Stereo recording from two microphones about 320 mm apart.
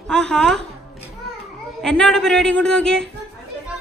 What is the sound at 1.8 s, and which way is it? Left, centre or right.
Speech, centre.